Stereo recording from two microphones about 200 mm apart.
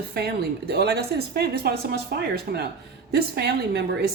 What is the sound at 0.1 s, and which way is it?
Speech, 55° right (ahead or behind).